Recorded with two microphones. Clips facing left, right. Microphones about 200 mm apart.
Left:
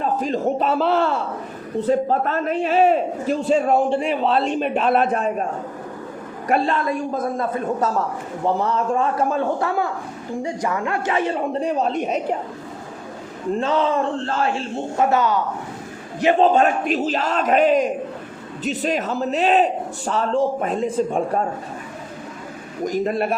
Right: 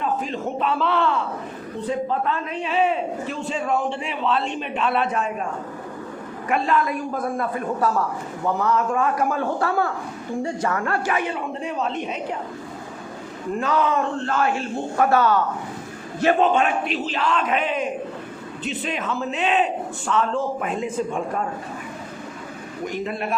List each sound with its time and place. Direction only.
0.0 s a sound: 40° left (ahead or behind)
1.9 s a man's voice: 45° left (ahead or behind)
6.5 s speech: 30° left (ahead or behind)
11.2 s a man's voice: 35° left (ahead or behind)
13.6 s speech: 25° left (ahead or behind)
16.4 s a man's voice: 40° left (ahead or behind)
22.8 s a man's voice: 40° left (ahead or behind)